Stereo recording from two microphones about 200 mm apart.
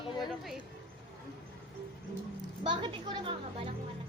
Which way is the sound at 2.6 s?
25° right (ahead or behind).